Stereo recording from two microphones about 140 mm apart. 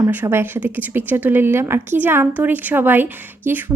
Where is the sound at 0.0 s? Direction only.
15° right (ahead or behind).